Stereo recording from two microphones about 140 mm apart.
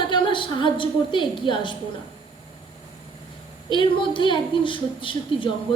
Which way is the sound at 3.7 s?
35° left (ahead or behind).